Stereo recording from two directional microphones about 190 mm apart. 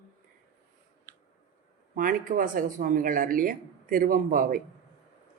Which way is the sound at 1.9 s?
45° right (ahead or behind).